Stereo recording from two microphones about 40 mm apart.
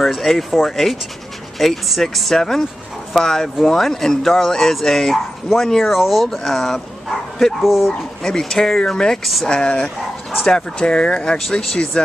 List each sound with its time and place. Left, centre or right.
0.0 s speech: centre
4.5 s speech: centre
5.1 s speech: centre
6.3 s speech: centre
7.6 s speech: centre
8.2 s speech: centre
9.2 s speech: centre
9.5 s speech: left